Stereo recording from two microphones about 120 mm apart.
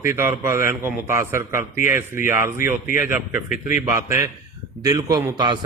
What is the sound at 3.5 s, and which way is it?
Speech, 90° left.